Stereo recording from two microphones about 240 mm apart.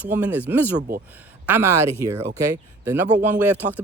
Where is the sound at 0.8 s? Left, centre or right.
Right.